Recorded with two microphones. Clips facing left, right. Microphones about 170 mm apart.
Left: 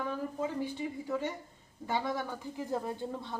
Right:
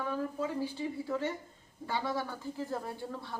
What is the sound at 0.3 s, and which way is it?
Speech, 15° left (ahead or behind).